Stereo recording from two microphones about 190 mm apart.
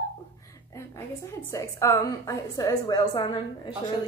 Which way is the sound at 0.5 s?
15° left (ahead or behind).